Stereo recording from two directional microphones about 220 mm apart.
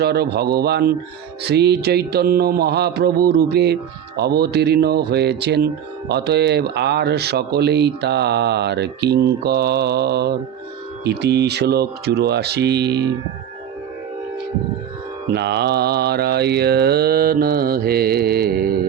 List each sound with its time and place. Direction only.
0.0 s speech: 45° right (ahead or behind)
15.3 s speech: 50° right (ahead or behind)